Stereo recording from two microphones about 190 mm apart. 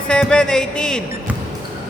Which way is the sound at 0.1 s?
5° left (ahead or behind).